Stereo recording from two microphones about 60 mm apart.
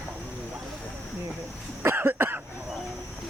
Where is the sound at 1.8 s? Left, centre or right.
Right.